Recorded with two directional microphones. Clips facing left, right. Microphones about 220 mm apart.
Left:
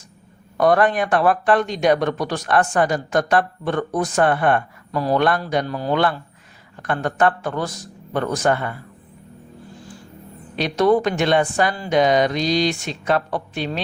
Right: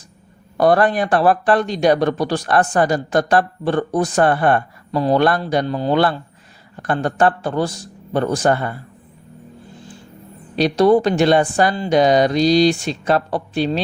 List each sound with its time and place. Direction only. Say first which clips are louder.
0.5 s speech: right 2 dB; 35° right (ahead or behind)
10.5 s speech: right 4 dB; 35° right (ahead or behind)